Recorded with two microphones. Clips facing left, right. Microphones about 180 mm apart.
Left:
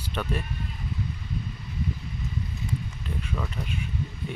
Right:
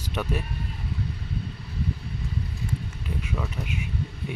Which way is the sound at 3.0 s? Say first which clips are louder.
Right 1 dB; 10° right (ahead or behind).